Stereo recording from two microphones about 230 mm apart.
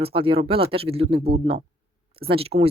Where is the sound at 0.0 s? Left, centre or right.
Right.